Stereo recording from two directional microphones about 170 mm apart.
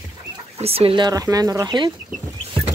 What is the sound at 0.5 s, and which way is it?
Speech, 35° right (ahead or behind).